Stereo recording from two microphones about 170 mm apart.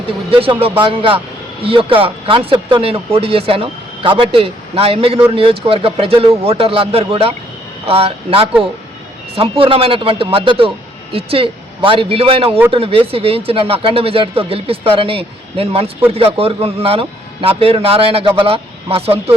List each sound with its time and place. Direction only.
0.3 s speech: 35° right (ahead or behind)
12.5 s speech: 10° right (ahead or behind)
12.7 s speech: 35° right (ahead or behind)